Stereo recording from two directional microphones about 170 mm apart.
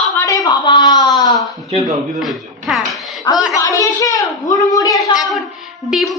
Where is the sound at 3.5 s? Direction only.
20° left (ahead or behind).